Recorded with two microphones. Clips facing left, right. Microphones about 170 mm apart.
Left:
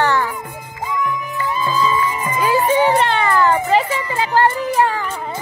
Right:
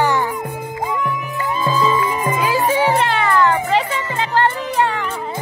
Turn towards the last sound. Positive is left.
turn(degrees=5)  # may be behind; listen again after turning